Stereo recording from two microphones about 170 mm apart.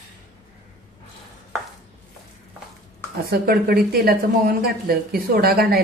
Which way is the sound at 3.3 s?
65° right (ahead or behind).